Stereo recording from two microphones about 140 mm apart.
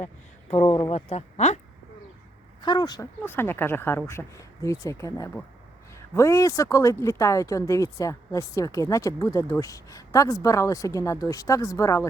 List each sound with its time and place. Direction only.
0.5 s speech: 50° left (ahead or behind)
2.6 s speech: 30° left (ahead or behind)
3.2 s speech: 15° left (ahead or behind)